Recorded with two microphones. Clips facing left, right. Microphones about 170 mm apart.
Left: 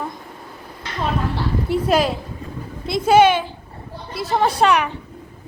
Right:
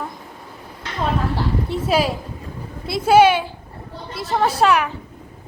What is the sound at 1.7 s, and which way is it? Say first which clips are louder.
A woman's voice: left 3 dB; 5° right (ahead or behind).